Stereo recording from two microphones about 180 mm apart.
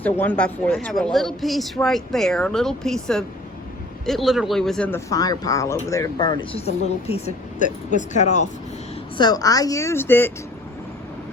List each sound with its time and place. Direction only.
0.0 s speech: 10° left (ahead or behind); by 8.4 s 40° left (ahead or behind)
9.1 s speech: 20° left (ahead or behind)